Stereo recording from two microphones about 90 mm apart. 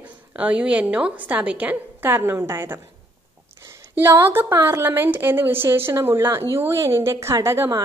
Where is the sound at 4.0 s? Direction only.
25° right (ahead or behind).